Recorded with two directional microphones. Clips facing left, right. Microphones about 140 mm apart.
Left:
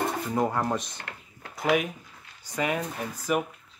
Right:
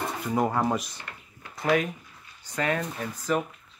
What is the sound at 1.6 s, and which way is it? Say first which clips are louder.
Speech: even; 10° left (ahead or behind).